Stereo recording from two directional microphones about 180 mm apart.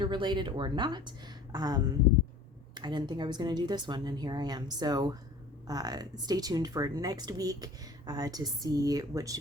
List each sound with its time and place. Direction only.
0.0 s speech: 25° right (ahead or behind)